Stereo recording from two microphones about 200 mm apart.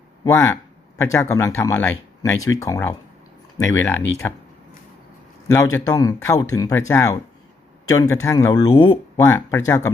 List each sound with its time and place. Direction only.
0.3 s speech: 10° left (ahead or behind)
5.5 s speech: 15° left (ahead or behind)